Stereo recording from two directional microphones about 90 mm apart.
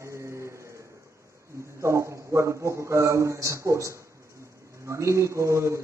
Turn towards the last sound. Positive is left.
turn(degrees=-35)  # may be behind; listen again after turning